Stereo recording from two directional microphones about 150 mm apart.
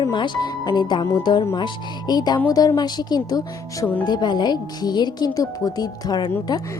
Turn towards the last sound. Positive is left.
turn(degrees=25)  # may be behind; listen again after turning